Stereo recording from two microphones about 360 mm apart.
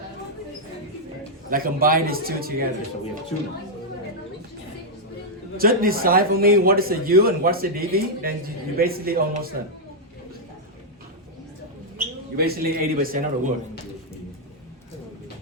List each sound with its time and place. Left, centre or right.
1.5 s a man's voice: right
5.5 s a man's voice: right
11.9 s a man's voice: right